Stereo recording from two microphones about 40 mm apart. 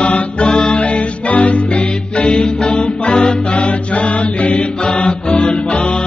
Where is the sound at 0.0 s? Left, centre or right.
Left.